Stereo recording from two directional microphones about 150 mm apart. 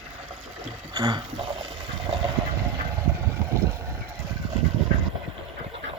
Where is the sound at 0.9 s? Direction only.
30° right (ahead or behind).